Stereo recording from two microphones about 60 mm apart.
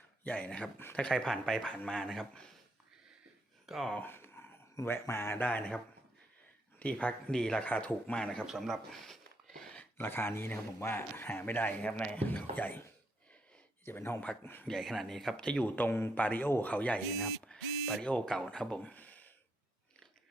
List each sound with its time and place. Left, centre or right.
0.3 s speech: left
3.7 s speech: centre
4.0 s a sound: left
6.7 s speech: left
7.6 s speech: left
8.4 s a sound: centre
10.0 s speech: left
11.8 s speech: left
13.8 s speech: left
14.7 s speech: centre
15.4 s speech: centre
15.7 s a sound: left
16.1 s speech: left
17.1 s speech: centre; by 19.3 s left